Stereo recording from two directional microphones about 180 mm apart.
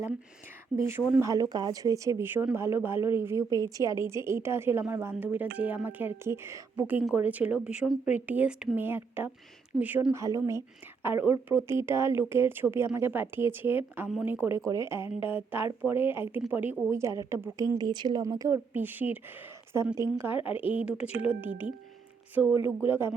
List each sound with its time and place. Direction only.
0.9 s speech: 15° right (ahead or behind)